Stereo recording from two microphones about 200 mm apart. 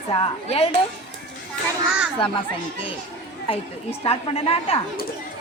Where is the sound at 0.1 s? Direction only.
30° left (ahead or behind).